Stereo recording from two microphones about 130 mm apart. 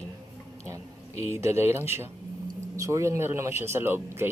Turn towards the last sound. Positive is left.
turn(degrees=-15)  # may be behind; listen again after turning